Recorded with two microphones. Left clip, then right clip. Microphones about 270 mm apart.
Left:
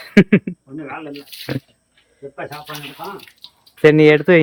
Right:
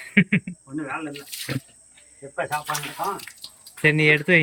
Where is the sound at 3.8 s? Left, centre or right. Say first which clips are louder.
Left 8 dB; centre.